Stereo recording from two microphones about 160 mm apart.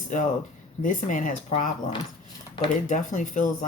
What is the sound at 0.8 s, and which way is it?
Speech, 50° left (ahead or behind).